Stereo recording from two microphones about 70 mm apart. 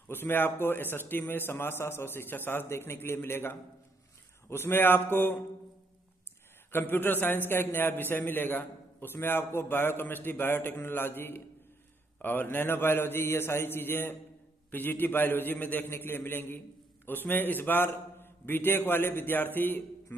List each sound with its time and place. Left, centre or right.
0.1 s a man's voice: left
6.7 s a man's voice: left